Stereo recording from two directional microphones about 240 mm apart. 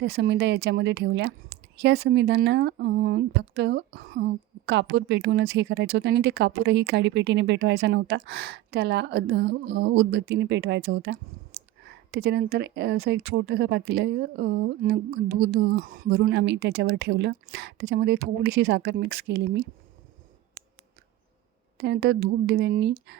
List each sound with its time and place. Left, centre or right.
0.0 s speech: right
21.8 s speech: right